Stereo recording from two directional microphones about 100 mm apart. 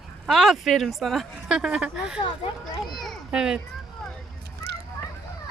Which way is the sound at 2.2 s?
50° left (ahead or behind).